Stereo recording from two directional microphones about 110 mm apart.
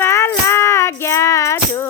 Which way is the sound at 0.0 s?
20° left (ahead or behind).